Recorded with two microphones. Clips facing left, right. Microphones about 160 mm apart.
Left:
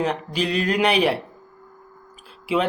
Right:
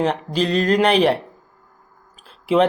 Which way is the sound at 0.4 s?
40° right (ahead or behind).